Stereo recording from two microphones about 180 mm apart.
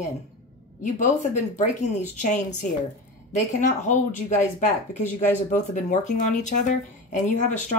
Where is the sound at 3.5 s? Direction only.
45° left (ahead or behind).